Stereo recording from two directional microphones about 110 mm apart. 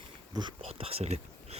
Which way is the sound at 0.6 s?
65° right (ahead or behind).